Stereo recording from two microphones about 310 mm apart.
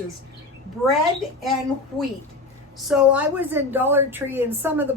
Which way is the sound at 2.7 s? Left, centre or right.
Centre.